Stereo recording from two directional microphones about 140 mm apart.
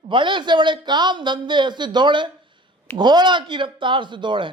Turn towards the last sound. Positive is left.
turn(degrees=-35)  # may be behind; listen again after turning